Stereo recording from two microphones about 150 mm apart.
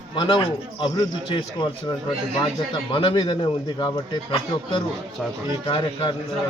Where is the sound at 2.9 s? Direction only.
35° left (ahead or behind).